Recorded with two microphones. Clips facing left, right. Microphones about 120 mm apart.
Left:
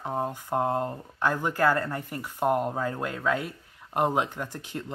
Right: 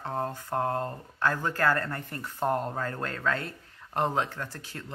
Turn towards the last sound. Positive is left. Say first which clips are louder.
# left 5 dB
turn(degrees=15)  # may be behind; listen again after turning